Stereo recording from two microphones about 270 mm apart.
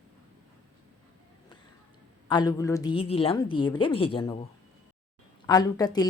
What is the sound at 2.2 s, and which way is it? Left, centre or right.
Speech, centre.